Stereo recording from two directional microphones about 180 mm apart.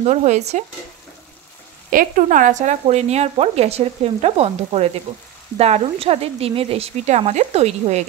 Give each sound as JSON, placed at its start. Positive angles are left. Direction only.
{"t": 0.0, "sound": "speech", "side_deg": -40}
{"t": 1.9, "sound": "speech", "side_deg": -50}